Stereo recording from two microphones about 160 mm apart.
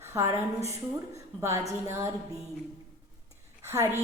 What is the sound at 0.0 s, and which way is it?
A woman's voice, 15° right (ahead or behind).